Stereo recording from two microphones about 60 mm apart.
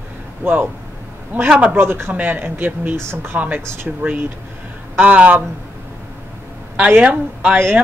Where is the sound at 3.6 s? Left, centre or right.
Right.